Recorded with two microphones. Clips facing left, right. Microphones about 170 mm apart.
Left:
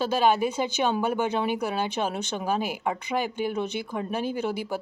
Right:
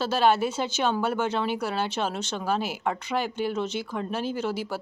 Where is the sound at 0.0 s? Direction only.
15° left (ahead or behind).